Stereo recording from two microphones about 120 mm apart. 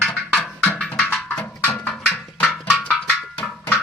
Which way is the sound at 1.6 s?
20° left (ahead or behind).